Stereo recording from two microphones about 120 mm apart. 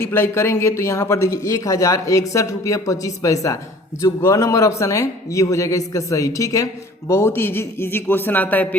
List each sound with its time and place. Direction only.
0.0 s a man's voice: 20° left (ahead or behind)